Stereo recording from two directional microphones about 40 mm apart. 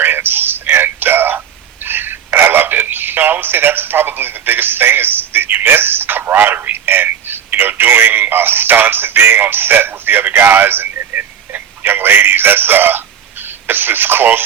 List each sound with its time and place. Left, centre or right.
0.0 s a sound: right
1.8 s telephone: right
10.4 s telephone: right
13.7 s speech: right